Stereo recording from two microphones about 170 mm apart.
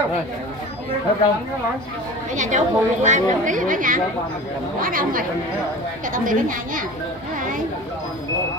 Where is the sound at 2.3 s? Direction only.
45° right (ahead or behind).